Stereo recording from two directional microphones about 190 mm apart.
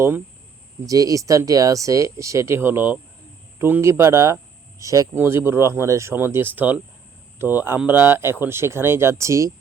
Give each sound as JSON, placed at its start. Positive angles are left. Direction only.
{"t": 0.9, "sound": "speech", "side_deg": -20}